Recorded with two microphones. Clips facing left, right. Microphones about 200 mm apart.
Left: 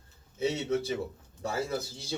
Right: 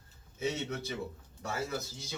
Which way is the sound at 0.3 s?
30° left (ahead or behind).